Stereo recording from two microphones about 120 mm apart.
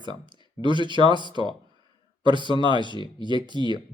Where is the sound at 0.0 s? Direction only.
40° right (ahead or behind).